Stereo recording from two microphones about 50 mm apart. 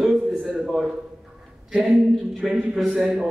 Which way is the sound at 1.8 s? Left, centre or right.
Centre.